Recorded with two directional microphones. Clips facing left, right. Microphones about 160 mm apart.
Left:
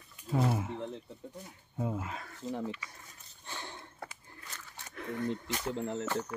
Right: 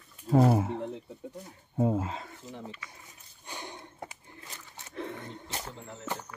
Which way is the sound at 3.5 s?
15° right (ahead or behind).